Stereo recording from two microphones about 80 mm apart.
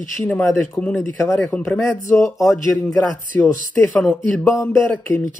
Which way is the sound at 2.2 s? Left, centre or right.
Left.